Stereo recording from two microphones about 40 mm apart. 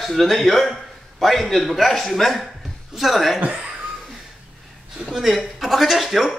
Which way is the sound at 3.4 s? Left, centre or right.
Right.